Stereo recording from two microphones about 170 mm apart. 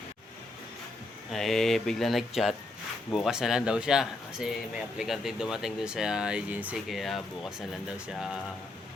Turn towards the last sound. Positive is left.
turn(degrees=0)  # may be behind; listen again after turning